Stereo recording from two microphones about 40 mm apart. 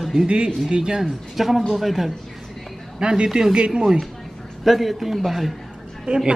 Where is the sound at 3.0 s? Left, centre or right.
Centre.